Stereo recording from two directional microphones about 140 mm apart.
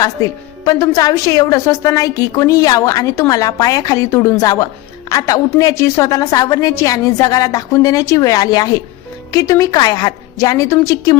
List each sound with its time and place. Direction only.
0.0 s a woman's voice: 25° left (ahead or behind)